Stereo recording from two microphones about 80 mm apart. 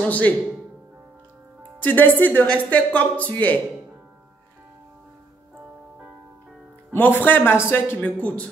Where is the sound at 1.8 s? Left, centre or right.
Left.